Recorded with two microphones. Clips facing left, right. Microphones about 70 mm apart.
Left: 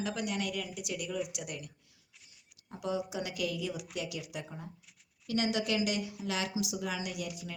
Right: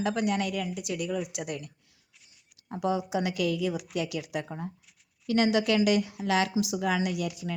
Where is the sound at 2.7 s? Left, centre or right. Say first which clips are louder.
Right 7 dB; right.